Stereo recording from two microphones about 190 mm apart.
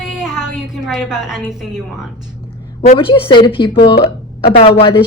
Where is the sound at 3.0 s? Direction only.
25° left (ahead or behind).